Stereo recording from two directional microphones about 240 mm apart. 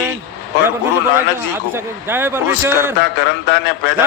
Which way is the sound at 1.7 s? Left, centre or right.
Centre.